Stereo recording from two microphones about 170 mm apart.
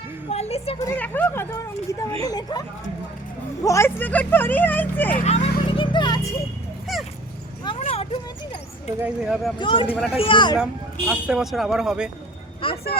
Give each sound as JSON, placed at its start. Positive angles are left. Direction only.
{"t": 0.3, "sound": "a sound", "side_deg": 40}
{"t": 0.9, "sound": "speech", "side_deg": 10}
{"t": 5.1, "sound": "a sound", "side_deg": 40}
{"t": 6.9, "sound": "dog", "side_deg": 0}
{"t": 7.6, "sound": "a sound", "side_deg": 35}
{"t": 9.0, "sound": "speech", "side_deg": -5}
{"t": 9.6, "sound": "speech", "side_deg": 30}
{"t": 11.1, "sound": "speech", "side_deg": -5}
{"t": 12.7, "sound": "vehicle", "side_deg": 65}